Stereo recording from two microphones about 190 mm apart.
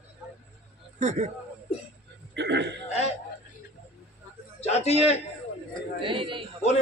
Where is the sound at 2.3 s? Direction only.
65° right (ahead or behind).